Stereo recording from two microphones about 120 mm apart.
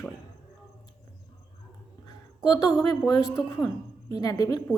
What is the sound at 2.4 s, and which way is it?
A woman's voice, 35° left (ahead or behind).